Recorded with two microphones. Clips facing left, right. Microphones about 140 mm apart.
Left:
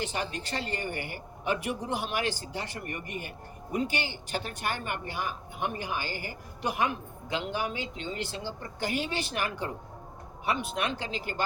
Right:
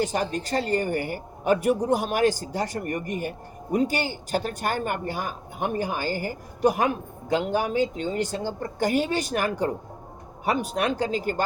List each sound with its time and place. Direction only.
0.0 s a woman's voice: 40° right (ahead or behind)